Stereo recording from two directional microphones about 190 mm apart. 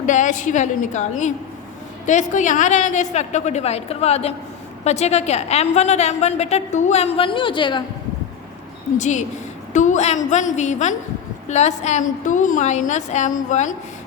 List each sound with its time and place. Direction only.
0.0 s a woman's voice: 40° left (ahead or behind); by 7.9 s 25° left (ahead or behind)
9.0 s a woman's voice: 40° left (ahead or behind)